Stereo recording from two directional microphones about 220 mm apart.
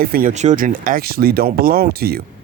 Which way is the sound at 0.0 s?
40° right (ahead or behind).